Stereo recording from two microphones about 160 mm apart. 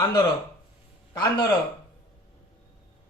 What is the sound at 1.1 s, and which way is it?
Speech, 25° left (ahead or behind).